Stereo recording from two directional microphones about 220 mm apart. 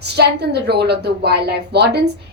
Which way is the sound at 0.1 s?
50° right (ahead or behind).